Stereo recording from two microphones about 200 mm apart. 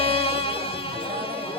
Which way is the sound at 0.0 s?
30° left (ahead or behind).